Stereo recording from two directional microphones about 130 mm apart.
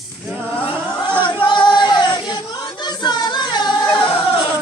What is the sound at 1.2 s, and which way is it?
Music, 40° left (ahead or behind).